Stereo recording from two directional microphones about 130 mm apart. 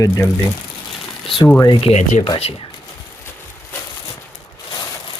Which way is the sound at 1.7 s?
45° left (ahead or behind).